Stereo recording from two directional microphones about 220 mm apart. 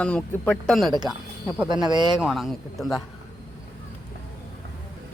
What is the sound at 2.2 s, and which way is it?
Speech, centre (ahead or behind).